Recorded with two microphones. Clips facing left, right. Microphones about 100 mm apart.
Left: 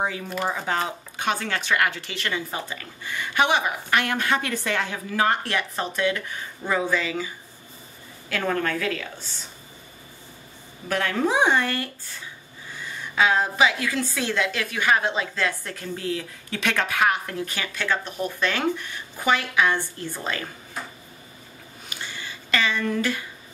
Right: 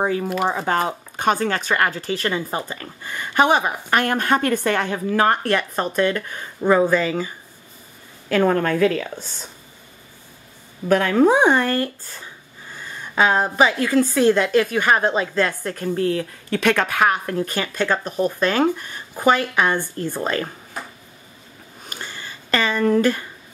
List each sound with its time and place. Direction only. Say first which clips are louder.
0.0 s a woman's voice: right 6 dB; 45° right (ahead or behind)
10.9 s a woman's voice: right 8 dB; 45° right (ahead or behind)
21.8 s a sound: right 2 dB; 45° right (ahead or behind)